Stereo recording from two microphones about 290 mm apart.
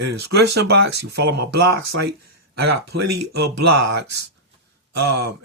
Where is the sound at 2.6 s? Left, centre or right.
Right.